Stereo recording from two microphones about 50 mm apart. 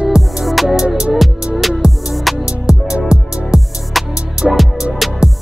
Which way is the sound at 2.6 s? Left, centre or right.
Centre.